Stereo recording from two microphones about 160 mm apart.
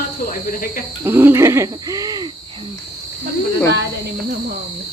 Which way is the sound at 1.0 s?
15° right (ahead or behind).